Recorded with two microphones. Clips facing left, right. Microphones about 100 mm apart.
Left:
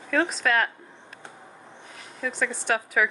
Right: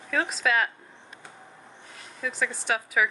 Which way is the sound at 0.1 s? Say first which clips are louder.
Left 2 dB; centre (ahead or behind).